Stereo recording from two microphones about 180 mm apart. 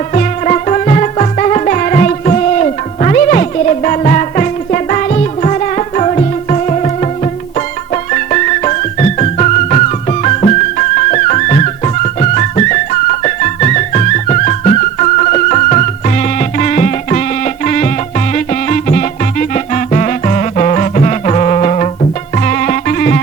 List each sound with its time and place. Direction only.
0.1 s music: 40° left (ahead or behind)
8.1 s music: 40° left (ahead or behind)